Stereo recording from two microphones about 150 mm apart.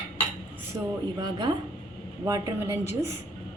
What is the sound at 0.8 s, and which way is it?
Speech, 25° right (ahead or behind).